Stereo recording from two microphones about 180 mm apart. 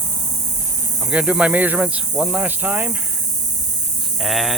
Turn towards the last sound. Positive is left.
turn(degrees=0)  # may be behind; listen again after turning